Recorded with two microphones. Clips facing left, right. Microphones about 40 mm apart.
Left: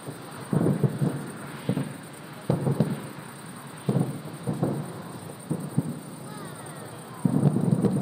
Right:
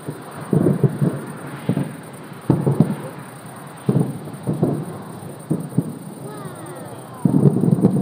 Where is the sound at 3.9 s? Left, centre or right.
Centre.